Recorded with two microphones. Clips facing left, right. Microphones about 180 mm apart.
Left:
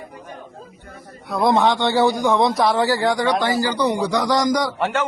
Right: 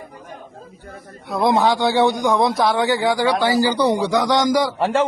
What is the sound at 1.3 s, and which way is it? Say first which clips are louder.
A man's voice: even; centre (ahead or behind).